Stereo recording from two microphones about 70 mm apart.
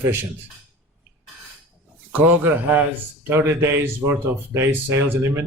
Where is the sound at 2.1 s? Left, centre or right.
Right.